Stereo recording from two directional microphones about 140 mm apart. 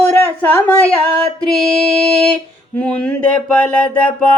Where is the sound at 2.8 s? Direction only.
5° left (ahead or behind).